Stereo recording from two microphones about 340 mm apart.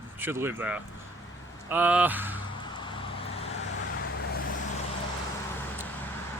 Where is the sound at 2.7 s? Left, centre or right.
Centre.